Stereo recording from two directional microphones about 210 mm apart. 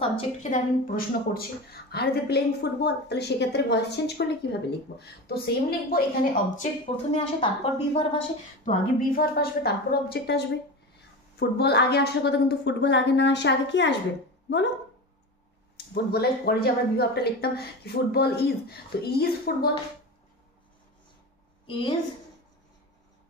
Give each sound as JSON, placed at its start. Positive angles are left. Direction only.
{"t": 0.0, "sound": "a woman's voice", "side_deg": 30}
{"t": 8.6, "sound": "a woman's voice", "side_deg": 45}
{"t": 15.9, "sound": "a woman's voice", "side_deg": 50}
{"t": 21.6, "sound": "a woman's voice", "side_deg": 25}